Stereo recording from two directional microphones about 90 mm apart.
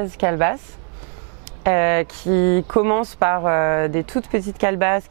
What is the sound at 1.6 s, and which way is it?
Speech, 15° right (ahead or behind).